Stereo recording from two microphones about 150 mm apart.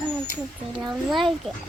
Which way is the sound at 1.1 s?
Centre (ahead or behind).